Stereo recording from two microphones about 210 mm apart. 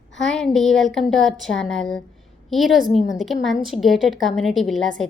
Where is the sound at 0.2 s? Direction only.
Centre (ahead or behind).